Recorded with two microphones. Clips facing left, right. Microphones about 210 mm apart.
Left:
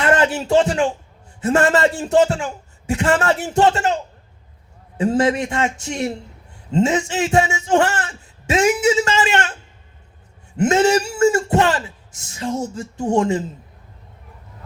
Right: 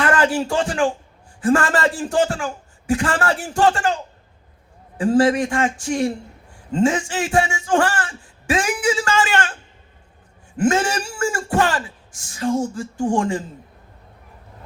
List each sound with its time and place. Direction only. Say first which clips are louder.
0.0 s speech: left 1 dB; 25° left (ahead or behind)
4.9 s speech: right 1 dB; 25° left (ahead or behind)
10.6 s speech: left 4 dB; 25° left (ahead or behind)